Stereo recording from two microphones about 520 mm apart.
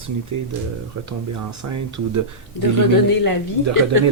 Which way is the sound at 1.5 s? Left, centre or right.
Right.